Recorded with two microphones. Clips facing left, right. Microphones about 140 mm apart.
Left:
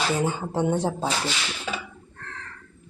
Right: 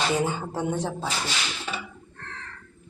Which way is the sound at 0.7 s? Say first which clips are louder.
Left 3 dB; 35° left (ahead or behind).